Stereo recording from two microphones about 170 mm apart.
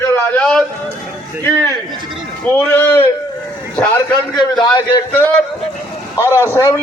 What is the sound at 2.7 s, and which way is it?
Speech, 10° left (ahead or behind).